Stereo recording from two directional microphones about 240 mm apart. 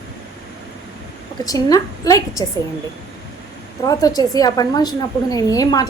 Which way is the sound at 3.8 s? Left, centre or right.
Centre.